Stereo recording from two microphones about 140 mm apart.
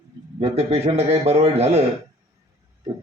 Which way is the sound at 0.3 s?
45° right (ahead or behind).